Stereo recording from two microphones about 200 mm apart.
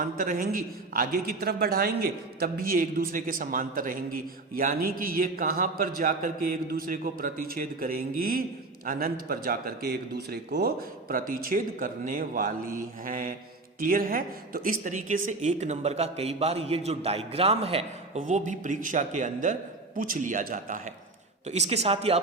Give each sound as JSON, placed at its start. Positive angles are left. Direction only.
{"t": 0.0, "sound": "a man's voice", "side_deg": -45}